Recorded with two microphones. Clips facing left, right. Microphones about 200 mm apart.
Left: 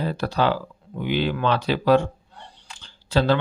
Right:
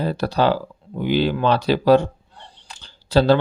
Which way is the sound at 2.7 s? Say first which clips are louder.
Right 5 dB; 35° right (ahead or behind).